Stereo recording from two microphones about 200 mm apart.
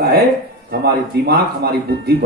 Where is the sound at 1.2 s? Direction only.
55° right (ahead or behind).